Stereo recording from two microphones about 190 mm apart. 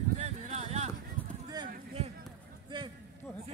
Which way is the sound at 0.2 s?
35° right (ahead or behind).